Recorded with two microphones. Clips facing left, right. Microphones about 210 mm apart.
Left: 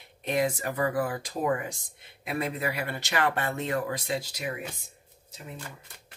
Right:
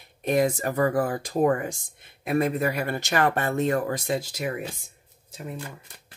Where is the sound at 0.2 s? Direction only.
45° right (ahead or behind).